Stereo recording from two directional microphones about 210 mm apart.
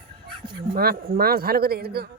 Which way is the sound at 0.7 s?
45° right (ahead or behind).